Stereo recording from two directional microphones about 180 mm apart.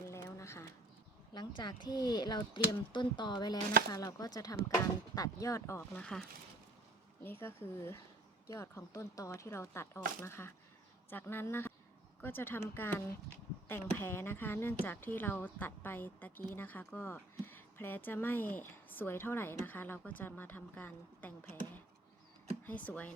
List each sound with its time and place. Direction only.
0.1 s a sound: 15° left (ahead or behind)
1.3 s speech: 25° left (ahead or behind); by 6.2 s 5° left (ahead or behind)
7.3 s speech: 10° left (ahead or behind)
22.6 s speech: 10° left (ahead or behind)